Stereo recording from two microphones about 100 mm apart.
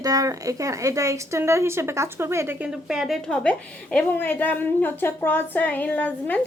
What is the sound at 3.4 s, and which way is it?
A woman's voice, 10° left (ahead or behind).